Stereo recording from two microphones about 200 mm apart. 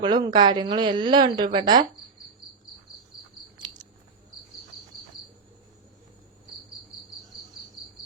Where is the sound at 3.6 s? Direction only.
20° right (ahead or behind).